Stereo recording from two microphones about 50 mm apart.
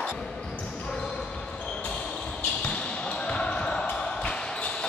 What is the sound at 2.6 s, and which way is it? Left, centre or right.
Basketball bounce, centre.